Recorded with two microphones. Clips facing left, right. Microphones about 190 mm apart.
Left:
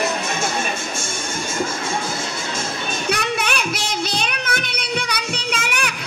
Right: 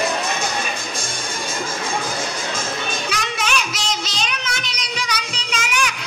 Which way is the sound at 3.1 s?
55° left (ahead or behind).